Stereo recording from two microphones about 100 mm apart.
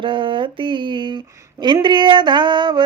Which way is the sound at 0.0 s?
55° right (ahead or behind).